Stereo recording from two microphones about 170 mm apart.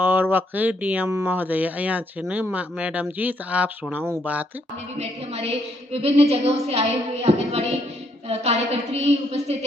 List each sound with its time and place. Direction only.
0.0 s speech: 10° right (ahead or behind)
4.9 s a woman's voice: 40° right (ahead or behind)